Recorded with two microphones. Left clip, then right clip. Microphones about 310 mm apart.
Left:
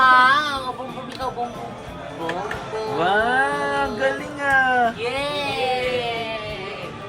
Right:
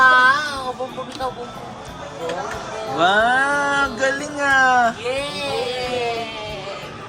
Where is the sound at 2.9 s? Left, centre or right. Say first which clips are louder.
Right 3 dB; centre.